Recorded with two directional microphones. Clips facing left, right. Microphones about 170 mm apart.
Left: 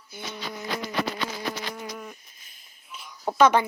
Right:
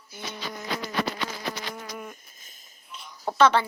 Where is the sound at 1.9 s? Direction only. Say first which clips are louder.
Even; centre (ahead or behind).